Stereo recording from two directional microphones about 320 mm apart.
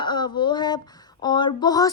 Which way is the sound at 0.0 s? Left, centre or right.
Centre.